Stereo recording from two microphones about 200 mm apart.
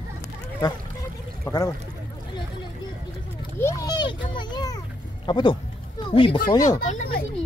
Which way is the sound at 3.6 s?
15° left (ahead or behind).